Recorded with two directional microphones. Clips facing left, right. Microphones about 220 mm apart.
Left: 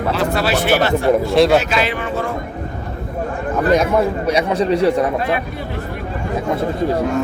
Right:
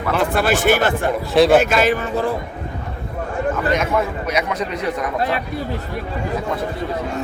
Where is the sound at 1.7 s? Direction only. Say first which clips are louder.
Right 2 dB; 45° right (ahead or behind).